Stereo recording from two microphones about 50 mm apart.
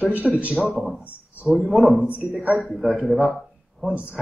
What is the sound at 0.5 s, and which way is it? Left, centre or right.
A man's voice, centre.